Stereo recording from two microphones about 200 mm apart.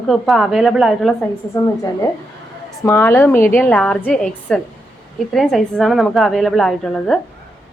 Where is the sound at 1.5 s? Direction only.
15° left (ahead or behind).